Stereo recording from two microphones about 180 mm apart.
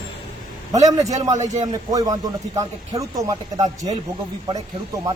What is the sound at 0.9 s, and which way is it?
Speech, 20° right (ahead or behind).